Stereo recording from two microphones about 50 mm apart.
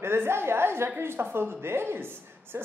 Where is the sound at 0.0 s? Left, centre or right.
Right.